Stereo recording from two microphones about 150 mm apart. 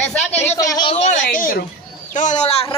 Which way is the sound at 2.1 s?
55° left (ahead or behind).